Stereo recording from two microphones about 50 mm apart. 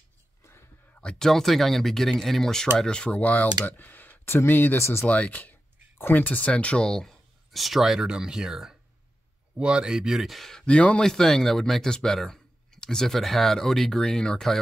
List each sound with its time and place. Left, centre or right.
0.4 s a sound: left
1.0 s speech: centre
2.9 s speech: left
3.2 s speech: left
4.7 s speech: left
5.0 s speech: left
6.9 s speech: centre
7.5 s speech: centre
10.6 s speech: left
11.0 s speech: centre